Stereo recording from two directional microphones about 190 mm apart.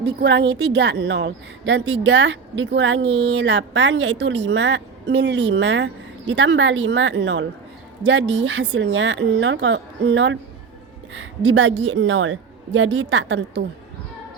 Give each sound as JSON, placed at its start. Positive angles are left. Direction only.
{"t": 0.0, "sound": "a woman's voice", "side_deg": -60}
{"t": 11.1, "sound": "speech", "side_deg": -90}